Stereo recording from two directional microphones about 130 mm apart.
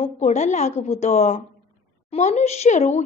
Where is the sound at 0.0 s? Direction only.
60° left (ahead or behind).